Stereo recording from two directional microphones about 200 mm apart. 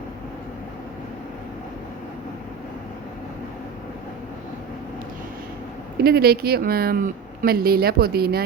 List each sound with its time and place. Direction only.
6.0 s speech: 50° right (ahead or behind)